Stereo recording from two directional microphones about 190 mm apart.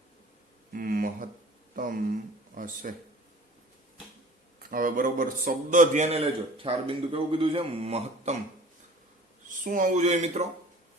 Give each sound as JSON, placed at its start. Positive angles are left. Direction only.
{"t": 0.7, "sound": "a sound", "side_deg": -50}
{"t": 2.5, "sound": "speech", "side_deg": -45}
{"t": 4.7, "sound": "a man's voice", "side_deg": -45}
{"t": 9.5, "sound": "a man's voice", "side_deg": -45}